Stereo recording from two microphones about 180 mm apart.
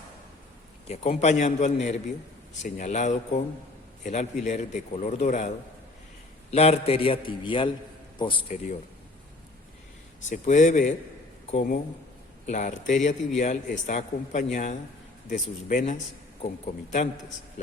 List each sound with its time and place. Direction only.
0.9 s a man's voice: 35° left (ahead or behind)
6.5 s a man's voice: 35° left (ahead or behind)
10.2 s a man's voice: 40° left (ahead or behind)